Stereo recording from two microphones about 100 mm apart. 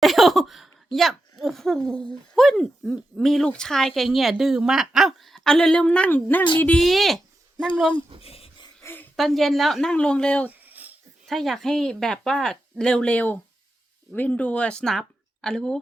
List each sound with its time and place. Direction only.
0.0 s speech: centre (ahead or behind); by 6.4 s 20° left (ahead or behind)
6.7 s speech: centre (ahead or behind)
8.2 s a sound: 80° left
8.8 s a sound: 20° left (ahead or behind)
9.1 s speech: centre (ahead or behind)
9.9 s speech: 10° left (ahead or behind)
10.7 s wheeze: 15° right (ahead or behind)
11.3 s speech: centre (ahead or behind)